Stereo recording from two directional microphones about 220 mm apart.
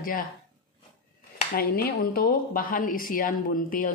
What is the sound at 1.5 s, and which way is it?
A woman's voice, 45° left (ahead or behind).